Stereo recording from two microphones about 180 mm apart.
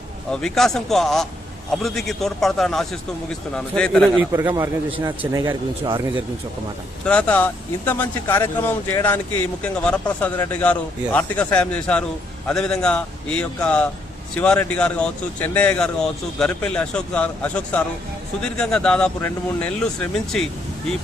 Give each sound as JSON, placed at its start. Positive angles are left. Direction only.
{"t": 0.3, "sound": "speech", "side_deg": 5}
{"t": 4.2, "sound": "a man's voice", "side_deg": -15}
{"t": 7.0, "sound": "speech", "side_deg": 5}